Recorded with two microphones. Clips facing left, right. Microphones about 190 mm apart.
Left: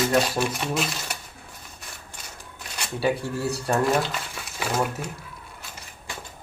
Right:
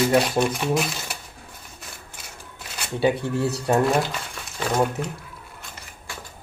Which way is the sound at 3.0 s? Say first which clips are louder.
Right 4 dB; 20° right (ahead or behind).